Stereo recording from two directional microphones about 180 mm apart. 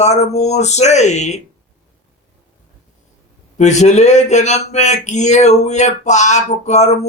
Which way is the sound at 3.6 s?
40° left (ahead or behind).